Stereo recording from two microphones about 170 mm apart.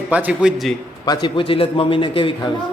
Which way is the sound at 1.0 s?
25° left (ahead or behind).